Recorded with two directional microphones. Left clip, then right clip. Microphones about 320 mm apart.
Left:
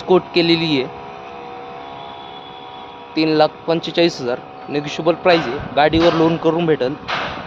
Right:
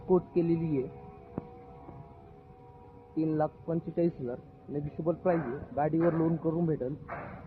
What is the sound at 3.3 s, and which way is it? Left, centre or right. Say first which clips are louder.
Speech: left 19 dB; left.